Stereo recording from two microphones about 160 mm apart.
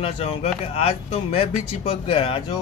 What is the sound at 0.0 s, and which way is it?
Speech, 40° left (ahead or behind).